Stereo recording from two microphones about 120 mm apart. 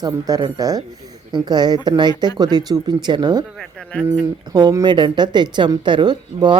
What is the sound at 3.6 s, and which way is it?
Speech, 5° left (ahead or behind).